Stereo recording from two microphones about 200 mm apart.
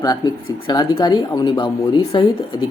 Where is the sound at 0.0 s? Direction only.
20° left (ahead or behind).